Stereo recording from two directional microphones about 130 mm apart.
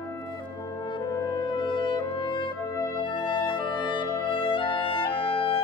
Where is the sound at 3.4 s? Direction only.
35° left (ahead or behind).